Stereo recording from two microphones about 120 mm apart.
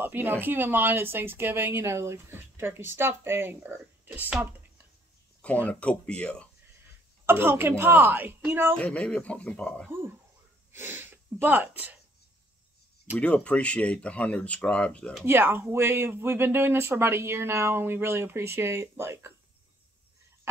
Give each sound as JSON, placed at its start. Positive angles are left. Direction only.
{"t": 0.0, "sound": "speech", "side_deg": -15}
{"t": 5.7, "sound": "speech", "side_deg": 10}
{"t": 7.2, "sound": "speech", "side_deg": -20}
{"t": 8.7, "sound": "speech", "side_deg": 10}
{"t": 10.7, "sound": "speech", "side_deg": -20}
{"t": 13.2, "sound": "speech", "side_deg": 10}
{"t": 15.2, "sound": "speech", "side_deg": -20}